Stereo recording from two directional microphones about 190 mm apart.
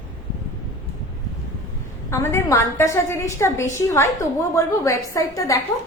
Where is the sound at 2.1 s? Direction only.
15° left (ahead or behind).